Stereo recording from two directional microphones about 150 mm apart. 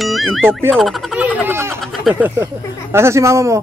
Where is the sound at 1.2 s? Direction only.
10° right (ahead or behind).